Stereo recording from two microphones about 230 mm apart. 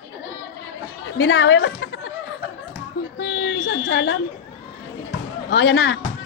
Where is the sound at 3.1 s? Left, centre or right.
Left.